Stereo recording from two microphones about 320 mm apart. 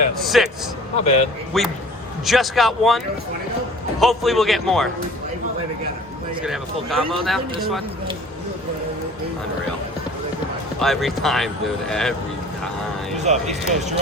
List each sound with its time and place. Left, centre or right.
0.2 s speech: centre
0.9 s a man's voice: centre
1.5 s speech: centre
4.0 s speech: centre
6.4 s speech: centre
10.8 s speech: centre
13.1 s speech: right